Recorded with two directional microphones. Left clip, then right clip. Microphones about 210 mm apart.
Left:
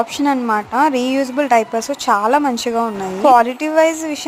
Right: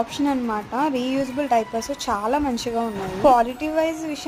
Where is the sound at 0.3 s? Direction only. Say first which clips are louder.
Left 8 dB; 20° left (ahead or behind).